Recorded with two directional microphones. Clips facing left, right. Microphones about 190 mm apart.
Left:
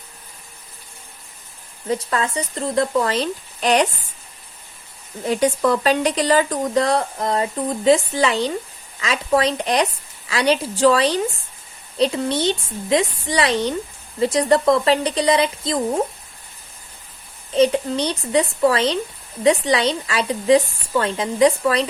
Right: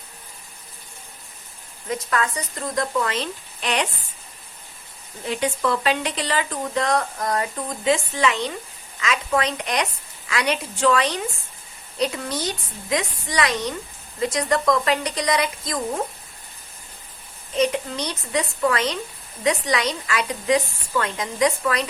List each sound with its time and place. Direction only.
1.9 s speech: 30° left (ahead or behind)
5.2 s a woman's voice: 40° left (ahead or behind)
17.5 s speech: 30° left (ahead or behind)